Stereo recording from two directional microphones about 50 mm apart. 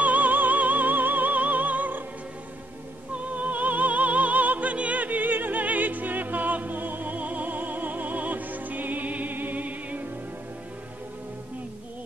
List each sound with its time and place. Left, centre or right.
0.0 s music: right
3.3 s music: right